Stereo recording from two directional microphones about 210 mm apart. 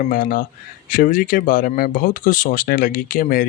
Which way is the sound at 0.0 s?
40° left (ahead or behind).